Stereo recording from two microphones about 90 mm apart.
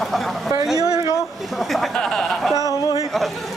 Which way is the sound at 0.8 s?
45° right (ahead or behind).